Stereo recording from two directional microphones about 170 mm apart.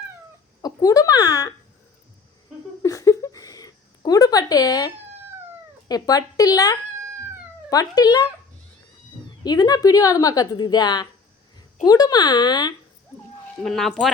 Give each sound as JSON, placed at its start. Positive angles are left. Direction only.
{"t": 0.6, "sound": "speech", "side_deg": 20}
{"t": 2.8, "sound": "a sound", "side_deg": 20}
{"t": 5.9, "sound": "a woman's voice", "side_deg": 20}
{"t": 9.4, "sound": "a woman's voice", "side_deg": 25}
{"t": 13.6, "sound": "speech", "side_deg": 5}